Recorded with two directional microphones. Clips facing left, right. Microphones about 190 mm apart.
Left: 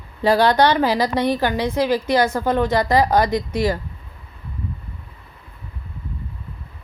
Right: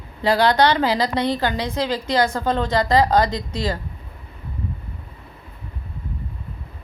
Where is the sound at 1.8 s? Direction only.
15° right (ahead or behind).